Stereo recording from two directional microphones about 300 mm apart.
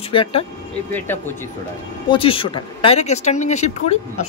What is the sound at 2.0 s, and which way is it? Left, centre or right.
Speech, centre.